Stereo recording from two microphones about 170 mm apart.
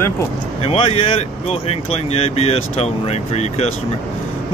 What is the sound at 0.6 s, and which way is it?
Speech, 35° left (ahead or behind).